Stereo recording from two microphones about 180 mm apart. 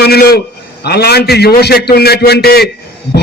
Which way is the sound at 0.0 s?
60° left (ahead or behind).